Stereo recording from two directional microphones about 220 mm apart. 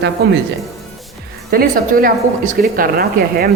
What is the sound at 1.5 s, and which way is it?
A woman's voice, 40° right (ahead or behind).